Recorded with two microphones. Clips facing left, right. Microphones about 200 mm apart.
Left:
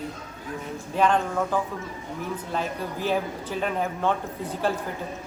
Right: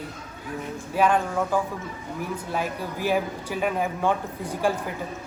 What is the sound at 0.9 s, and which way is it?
Speech, 10° right (ahead or behind).